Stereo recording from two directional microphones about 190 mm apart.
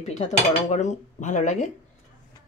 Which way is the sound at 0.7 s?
40° left (ahead or behind).